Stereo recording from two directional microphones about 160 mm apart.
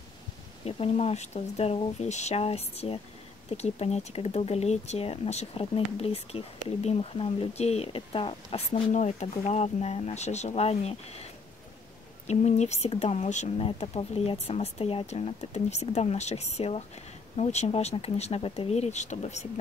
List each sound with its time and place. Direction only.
0.7 s speech: 40° left (ahead or behind)
12.3 s speech: 45° left (ahead or behind)